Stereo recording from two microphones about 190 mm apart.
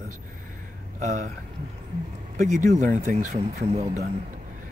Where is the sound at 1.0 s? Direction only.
40° right (ahead or behind).